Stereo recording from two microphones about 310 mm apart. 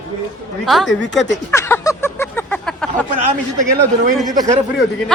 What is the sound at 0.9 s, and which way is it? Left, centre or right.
Speech, left.